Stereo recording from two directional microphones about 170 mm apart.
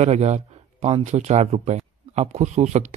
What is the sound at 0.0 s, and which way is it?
Speech, 40° right (ahead or behind).